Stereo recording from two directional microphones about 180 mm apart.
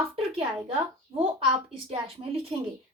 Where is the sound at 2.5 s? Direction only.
30° right (ahead or behind).